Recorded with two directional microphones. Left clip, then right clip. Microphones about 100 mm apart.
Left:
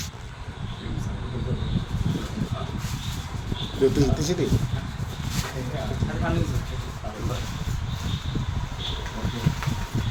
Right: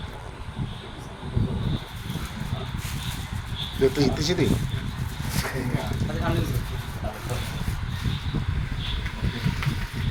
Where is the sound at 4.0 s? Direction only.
10° right (ahead or behind).